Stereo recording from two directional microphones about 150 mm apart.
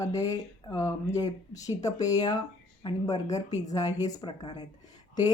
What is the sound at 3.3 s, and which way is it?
Speech, 50° left (ahead or behind).